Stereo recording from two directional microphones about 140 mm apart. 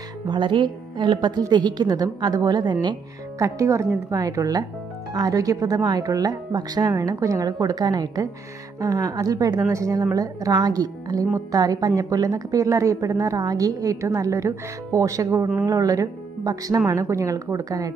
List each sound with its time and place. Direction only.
0.3 s a woman's voice: 35° right (ahead or behind)